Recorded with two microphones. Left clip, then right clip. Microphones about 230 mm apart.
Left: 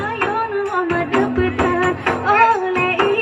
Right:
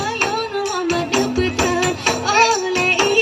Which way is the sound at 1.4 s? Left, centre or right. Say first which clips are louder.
Left 1 dB; right.